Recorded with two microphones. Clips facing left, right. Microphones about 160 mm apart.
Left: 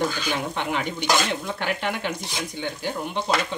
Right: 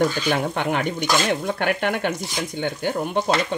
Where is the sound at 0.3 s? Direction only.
50° right (ahead or behind).